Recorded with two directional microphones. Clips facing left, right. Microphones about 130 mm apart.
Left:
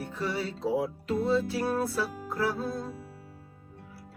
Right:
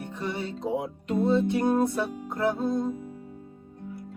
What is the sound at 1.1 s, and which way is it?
Music, 5° left (ahead or behind).